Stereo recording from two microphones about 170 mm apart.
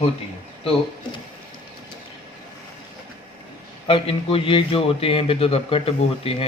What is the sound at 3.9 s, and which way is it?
Speech, 30° left (ahead or behind).